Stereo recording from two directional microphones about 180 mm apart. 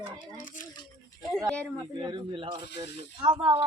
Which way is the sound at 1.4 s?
5° left (ahead or behind).